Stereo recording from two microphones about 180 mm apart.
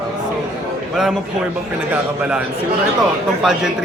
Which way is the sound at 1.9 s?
5° right (ahead or behind).